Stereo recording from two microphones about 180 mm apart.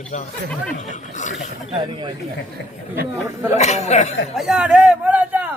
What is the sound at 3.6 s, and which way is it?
Speech, 40° left (ahead or behind).